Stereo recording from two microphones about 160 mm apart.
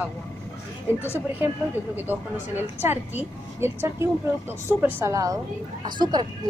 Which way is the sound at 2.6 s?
10° right (ahead or behind).